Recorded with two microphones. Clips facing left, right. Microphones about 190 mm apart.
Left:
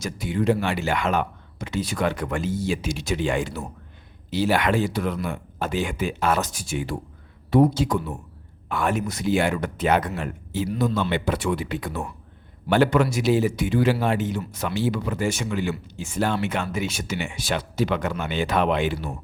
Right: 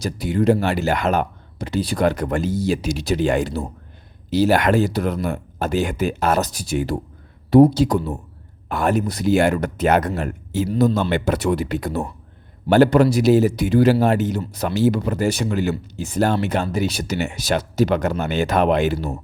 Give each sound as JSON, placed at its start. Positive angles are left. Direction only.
{"t": 0.0, "sound": "speech", "side_deg": -40}